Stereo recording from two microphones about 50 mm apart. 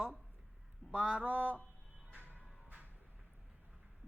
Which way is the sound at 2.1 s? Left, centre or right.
Right.